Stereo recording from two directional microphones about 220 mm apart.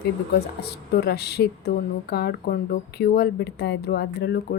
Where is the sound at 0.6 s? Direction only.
45° left (ahead or behind).